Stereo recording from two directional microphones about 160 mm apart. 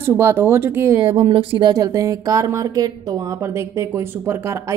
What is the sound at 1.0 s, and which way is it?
Speech, 35° right (ahead or behind).